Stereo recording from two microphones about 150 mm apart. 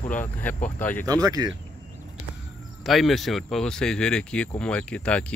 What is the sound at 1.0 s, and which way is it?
Speech, 25° right (ahead or behind).